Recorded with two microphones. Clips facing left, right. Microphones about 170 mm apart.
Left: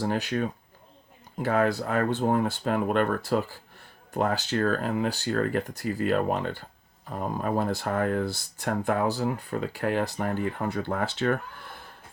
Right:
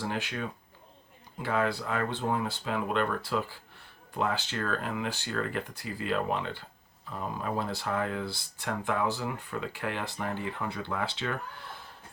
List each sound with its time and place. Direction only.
0.0 s speech: 40° left (ahead or behind)